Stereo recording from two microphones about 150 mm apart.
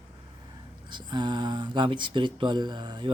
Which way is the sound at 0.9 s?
30° right (ahead or behind).